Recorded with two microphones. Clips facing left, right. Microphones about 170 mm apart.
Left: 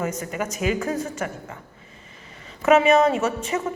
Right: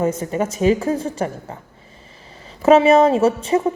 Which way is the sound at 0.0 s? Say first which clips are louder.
Right 7 dB; 30° right (ahead or behind).